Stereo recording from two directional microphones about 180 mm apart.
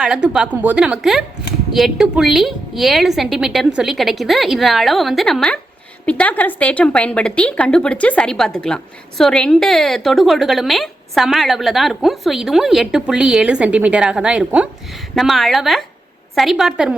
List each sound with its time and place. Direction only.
0.0 s a woman's voice: 5° right (ahead or behind)